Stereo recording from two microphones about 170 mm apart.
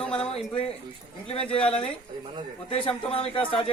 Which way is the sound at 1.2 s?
35° left (ahead or behind).